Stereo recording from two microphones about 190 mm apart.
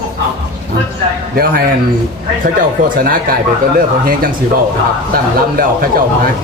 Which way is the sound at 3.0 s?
50° right (ahead or behind).